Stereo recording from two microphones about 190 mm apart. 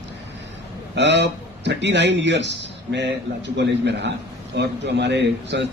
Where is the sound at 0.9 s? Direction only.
65° right (ahead or behind).